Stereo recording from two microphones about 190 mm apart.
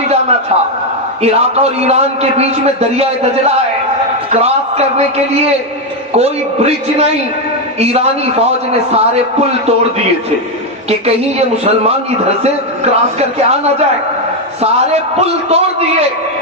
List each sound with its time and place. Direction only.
1.2 s a man's voice: 35° right (ahead or behind)
4.3 s a man's voice: 35° right (ahead or behind)
10.8 s a man's voice: 35° right (ahead or behind)
15.2 s a man's voice: 35° right (ahead or behind)